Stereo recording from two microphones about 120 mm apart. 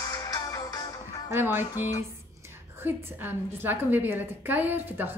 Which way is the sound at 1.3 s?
20° right (ahead or behind).